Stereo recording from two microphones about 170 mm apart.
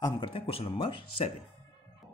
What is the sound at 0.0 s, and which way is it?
Speech, 30° left (ahead or behind).